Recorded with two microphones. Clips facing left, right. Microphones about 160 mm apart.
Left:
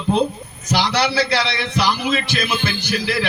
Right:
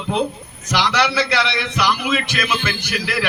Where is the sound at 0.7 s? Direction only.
35° left (ahead or behind).